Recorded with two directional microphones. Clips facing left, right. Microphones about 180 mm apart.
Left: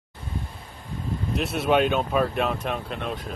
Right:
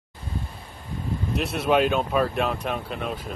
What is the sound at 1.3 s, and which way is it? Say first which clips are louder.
Speech: even; centre (ahead or behind).